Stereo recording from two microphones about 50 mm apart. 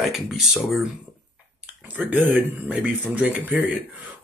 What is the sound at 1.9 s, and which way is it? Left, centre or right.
Speech, right.